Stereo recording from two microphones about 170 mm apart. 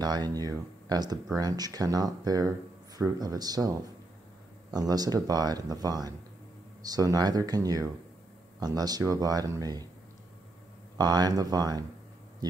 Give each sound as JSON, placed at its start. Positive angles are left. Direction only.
{"t": 0.0, "sound": "speech", "side_deg": -25}
{"t": 11.0, "sound": "speech", "side_deg": -25}